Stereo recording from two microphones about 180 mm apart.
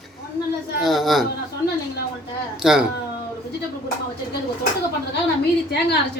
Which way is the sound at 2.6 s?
5° right (ahead or behind).